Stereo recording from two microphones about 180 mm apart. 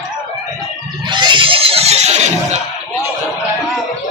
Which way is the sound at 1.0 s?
25° right (ahead or behind).